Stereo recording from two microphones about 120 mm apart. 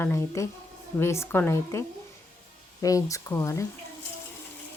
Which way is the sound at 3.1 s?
25° left (ahead or behind).